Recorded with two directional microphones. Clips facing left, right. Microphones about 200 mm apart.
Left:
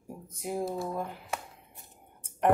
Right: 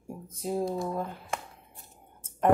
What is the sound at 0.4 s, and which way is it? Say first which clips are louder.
Speech: right 3 dB; 15° left (ahead or behind).